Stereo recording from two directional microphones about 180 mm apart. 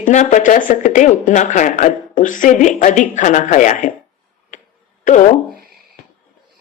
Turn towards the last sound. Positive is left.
turn(degrees=45)  # may be behind; listen again after turning